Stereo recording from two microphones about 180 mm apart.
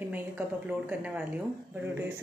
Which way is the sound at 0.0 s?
10° right (ahead or behind).